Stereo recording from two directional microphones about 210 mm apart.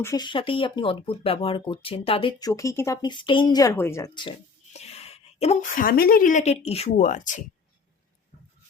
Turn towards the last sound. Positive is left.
turn(degrees=35)  # may be behind; listen again after turning